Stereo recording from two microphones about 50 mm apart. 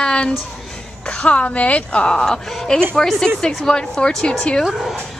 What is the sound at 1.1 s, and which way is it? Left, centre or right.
A woman's voice, left.